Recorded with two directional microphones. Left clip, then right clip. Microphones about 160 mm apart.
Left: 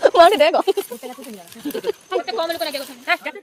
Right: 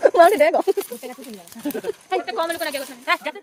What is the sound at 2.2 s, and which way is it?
Speech, 5° right (ahead or behind).